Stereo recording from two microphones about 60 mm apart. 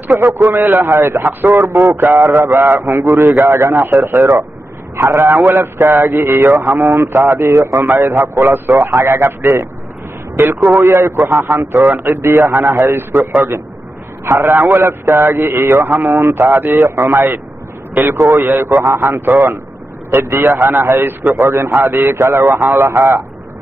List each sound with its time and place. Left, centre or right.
0.1 s a man's voice: right
14.2 s a man's voice: right
21.5 s a man's voice: right
21.8 s a man's voice: right